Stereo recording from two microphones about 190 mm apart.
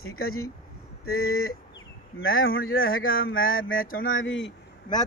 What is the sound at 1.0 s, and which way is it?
Speech, 90° left.